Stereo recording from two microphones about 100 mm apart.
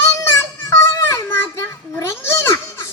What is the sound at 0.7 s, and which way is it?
Children playing, 30° left (ahead or behind).